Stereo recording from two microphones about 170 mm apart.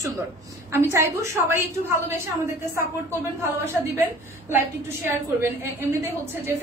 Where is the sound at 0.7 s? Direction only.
15° right (ahead or behind).